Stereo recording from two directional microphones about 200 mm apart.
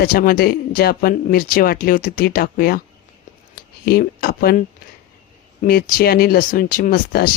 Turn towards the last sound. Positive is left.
turn(degrees=45)  # may be behind; listen again after turning